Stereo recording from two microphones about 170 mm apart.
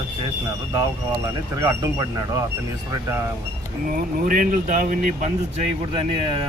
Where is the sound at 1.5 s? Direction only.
20° right (ahead or behind).